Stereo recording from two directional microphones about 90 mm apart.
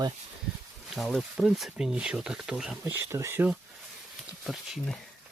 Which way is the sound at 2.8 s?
25° right (ahead or behind).